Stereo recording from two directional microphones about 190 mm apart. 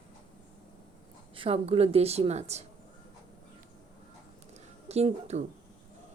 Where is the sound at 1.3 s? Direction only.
30° right (ahead or behind).